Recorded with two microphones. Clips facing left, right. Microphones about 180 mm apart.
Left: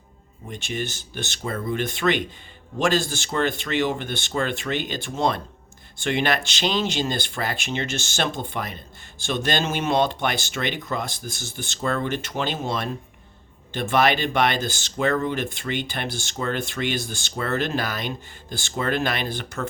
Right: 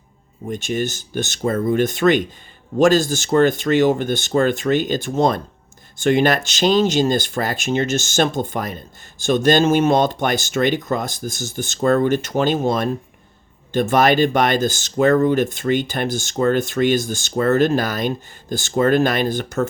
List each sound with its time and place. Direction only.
0.4 s speech: 45° right (ahead or behind)